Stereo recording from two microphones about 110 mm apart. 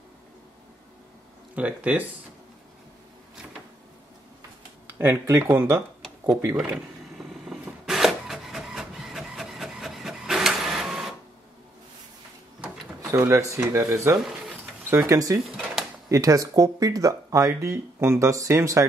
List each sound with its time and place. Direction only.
1.5 s speech: 15° right (ahead or behind)
4.9 s speech: 20° right (ahead or behind)
7.6 s printer: 5° right (ahead or behind)
13.1 s speech: 30° right (ahead or behind)
15.5 s drawer open or close: 5° right (ahead or behind)
16.1 s speech: 30° right (ahead or behind)